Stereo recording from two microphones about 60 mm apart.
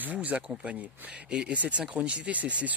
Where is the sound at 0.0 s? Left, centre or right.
Right.